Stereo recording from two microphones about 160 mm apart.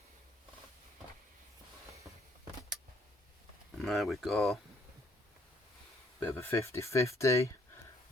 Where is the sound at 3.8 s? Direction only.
Centre (ahead or behind).